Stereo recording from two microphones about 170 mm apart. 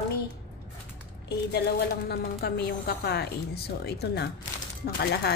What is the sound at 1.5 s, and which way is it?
Speech, 70° left (ahead or behind).